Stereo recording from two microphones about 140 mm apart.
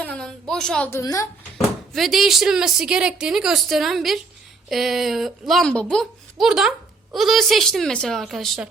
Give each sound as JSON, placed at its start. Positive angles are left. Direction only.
{"t": 0.0, "sound": "a sound", "side_deg": 5}
{"t": 0.9, "sound": "a woman's voice", "side_deg": 20}
{"t": 1.5, "sound": "speech", "side_deg": 0}